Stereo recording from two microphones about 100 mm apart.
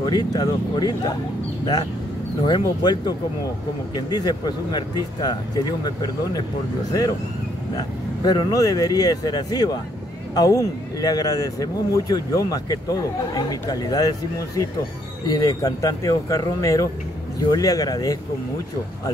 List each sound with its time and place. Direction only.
0.0 s speech: 40° left (ahead or behind)
2.4 s speech: 50° left (ahead or behind)
8.2 s a man's voice: 40° left (ahead or behind)